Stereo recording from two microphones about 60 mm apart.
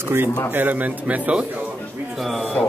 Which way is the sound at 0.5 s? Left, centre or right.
Right.